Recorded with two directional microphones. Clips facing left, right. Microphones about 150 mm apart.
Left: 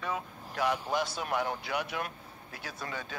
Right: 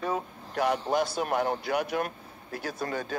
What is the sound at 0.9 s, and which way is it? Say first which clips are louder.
Speech: right 5 dB; 45° right (ahead or behind).